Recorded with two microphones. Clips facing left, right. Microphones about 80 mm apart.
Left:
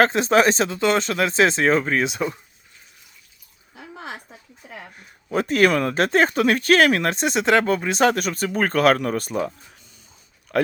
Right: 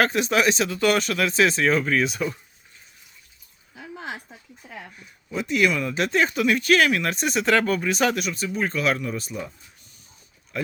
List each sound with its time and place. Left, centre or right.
0.0 s speech: left
5.3 s speech: left
10.5 s speech: left